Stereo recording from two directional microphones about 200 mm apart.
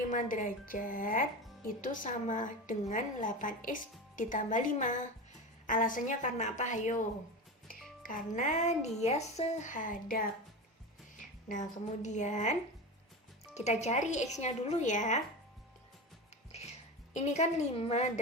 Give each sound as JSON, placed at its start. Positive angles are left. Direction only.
{"t": 0.1, "sound": "speech", "side_deg": 40}
{"t": 8.0, "sound": "speech", "side_deg": 40}
{"t": 11.2, "sound": "music", "side_deg": 40}
{"t": 12.0, "sound": "speech", "side_deg": 35}
{"t": 16.5, "sound": "music", "side_deg": 30}
{"t": 17.2, "sound": "speech", "side_deg": 35}